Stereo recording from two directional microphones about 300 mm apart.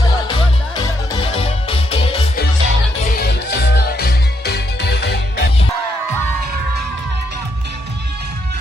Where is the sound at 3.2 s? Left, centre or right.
Left.